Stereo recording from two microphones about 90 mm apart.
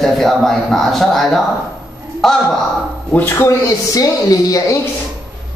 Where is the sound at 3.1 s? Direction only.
25° left (ahead or behind).